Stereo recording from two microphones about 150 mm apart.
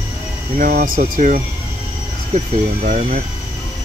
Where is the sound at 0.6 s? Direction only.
75° right (ahead or behind); by 1.4 s 60° right (ahead or behind).